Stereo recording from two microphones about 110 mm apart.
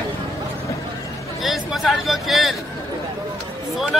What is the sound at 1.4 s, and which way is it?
Speech, centre (ahead or behind).